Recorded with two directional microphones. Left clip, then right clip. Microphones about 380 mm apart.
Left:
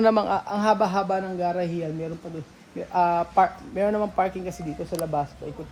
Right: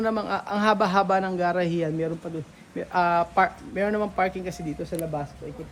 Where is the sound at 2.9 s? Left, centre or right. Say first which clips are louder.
Left 1 dB; centre.